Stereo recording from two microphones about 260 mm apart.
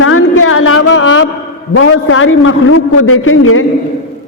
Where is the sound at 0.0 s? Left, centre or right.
Left.